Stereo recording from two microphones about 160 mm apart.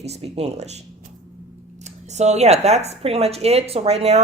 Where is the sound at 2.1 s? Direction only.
45° right (ahead or behind).